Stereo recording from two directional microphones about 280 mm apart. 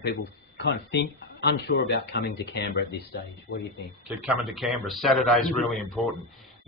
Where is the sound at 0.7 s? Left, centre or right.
Left.